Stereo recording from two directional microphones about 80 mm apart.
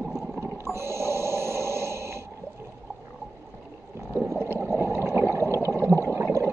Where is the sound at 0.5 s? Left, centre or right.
Right.